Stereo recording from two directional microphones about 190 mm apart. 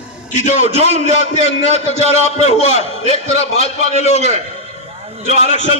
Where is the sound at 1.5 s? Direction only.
35° left (ahead or behind).